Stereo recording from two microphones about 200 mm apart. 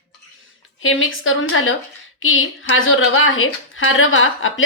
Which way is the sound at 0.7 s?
85° left.